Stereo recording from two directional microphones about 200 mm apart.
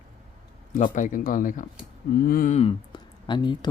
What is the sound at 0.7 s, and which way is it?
Speech, 40° left (ahead or behind).